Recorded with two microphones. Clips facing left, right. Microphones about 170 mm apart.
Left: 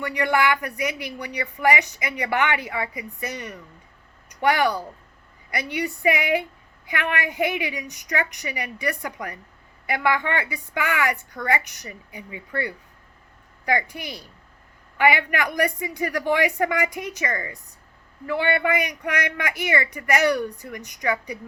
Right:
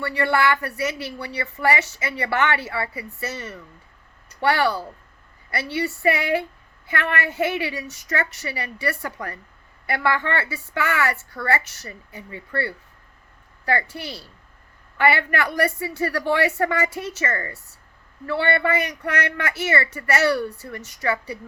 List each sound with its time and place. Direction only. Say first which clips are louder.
0.0 s speech: right 1 dB; 15° left (ahead or behind)